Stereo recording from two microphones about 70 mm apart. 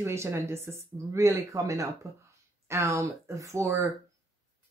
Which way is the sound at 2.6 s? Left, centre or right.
Right.